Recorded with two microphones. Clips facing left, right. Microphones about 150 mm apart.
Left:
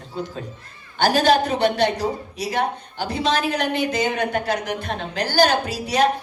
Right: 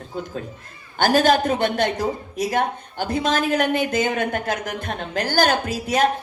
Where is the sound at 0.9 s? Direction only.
50° right (ahead or behind).